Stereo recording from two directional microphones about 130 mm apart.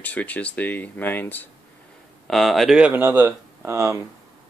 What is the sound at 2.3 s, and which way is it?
Speech, centre (ahead or behind).